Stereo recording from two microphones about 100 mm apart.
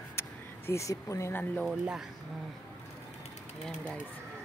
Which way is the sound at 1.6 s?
5° right (ahead or behind).